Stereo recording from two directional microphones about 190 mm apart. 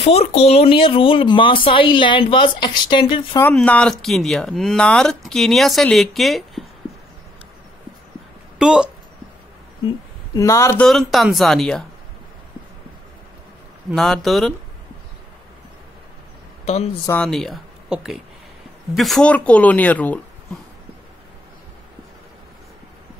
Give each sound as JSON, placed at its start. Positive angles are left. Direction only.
{"t": 0.0, "sound": "speech", "side_deg": 35}
{"t": 3.3, "sound": "speech", "side_deg": 10}
{"t": 8.5, "sound": "speech", "side_deg": -5}
{"t": 10.3, "sound": "speech", "side_deg": 15}
{"t": 10.9, "sound": "speech", "side_deg": 0}
{"t": 13.8, "sound": "speech", "side_deg": 0}
{"t": 16.6, "sound": "speech", "side_deg": 35}
{"t": 17.0, "sound": "speech", "side_deg": 10}